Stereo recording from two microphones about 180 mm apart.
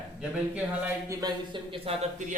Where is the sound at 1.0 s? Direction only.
20° right (ahead or behind); by 2.2 s 35° right (ahead or behind).